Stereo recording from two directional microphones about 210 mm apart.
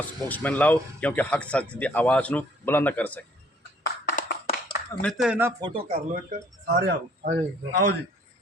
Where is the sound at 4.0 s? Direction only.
40° left (ahead or behind).